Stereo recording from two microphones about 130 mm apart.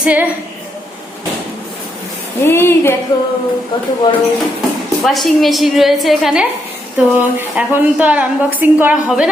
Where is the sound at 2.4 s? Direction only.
20° left (ahead or behind).